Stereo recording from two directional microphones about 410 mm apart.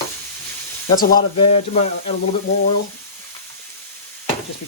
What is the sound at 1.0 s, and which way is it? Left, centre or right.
Speech, left.